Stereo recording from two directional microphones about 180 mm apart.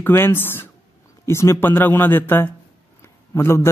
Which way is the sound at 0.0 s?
10° left (ahead or behind).